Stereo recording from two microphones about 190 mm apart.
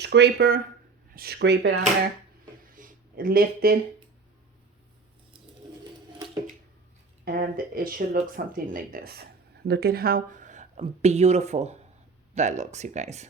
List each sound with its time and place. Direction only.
0.0 s speech: 60° right (ahead or behind)
2.6 s a sound: 45° right (ahead or behind)
7.3 s speech: 50° right (ahead or behind)